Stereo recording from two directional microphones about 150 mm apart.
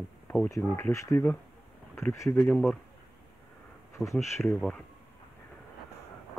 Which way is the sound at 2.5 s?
5° left (ahead or behind).